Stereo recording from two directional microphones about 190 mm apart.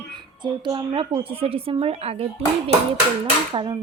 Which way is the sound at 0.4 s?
25° right (ahead or behind).